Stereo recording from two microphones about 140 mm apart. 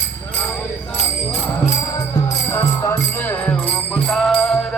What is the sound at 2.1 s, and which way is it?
Music, 20° left (ahead or behind).